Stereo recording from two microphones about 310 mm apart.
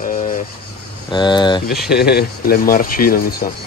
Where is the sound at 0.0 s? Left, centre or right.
Left.